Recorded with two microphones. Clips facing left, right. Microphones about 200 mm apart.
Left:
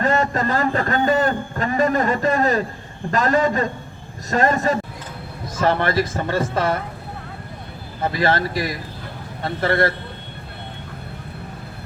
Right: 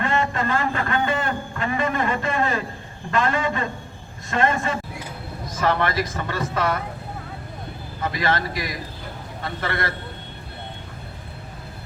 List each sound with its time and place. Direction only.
0.0 s a sound: 40° left (ahead or behind)
3.1 s speech: 40° left (ahead or behind)
8.0 s speech: 30° left (ahead or behind)